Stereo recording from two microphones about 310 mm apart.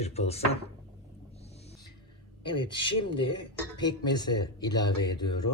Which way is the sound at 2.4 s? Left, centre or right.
Centre.